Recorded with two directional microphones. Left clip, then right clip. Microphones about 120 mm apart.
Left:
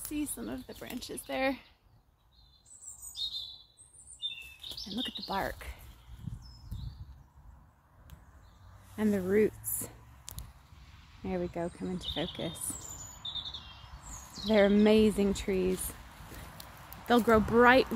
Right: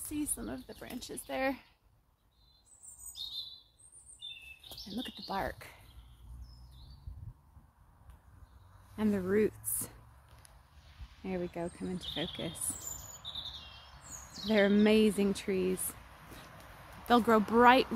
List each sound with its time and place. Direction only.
0.1 s speech: 25° left (ahead or behind)
4.8 s speech: 25° left (ahead or behind)
8.9 s speech: centre (ahead or behind)
11.2 s speech: centre (ahead or behind)
14.5 s speech: 5° left (ahead or behind)
17.0 s speech: 5° right (ahead or behind)